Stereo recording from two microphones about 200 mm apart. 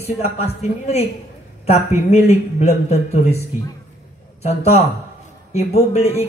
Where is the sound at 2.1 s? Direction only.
35° left (ahead or behind).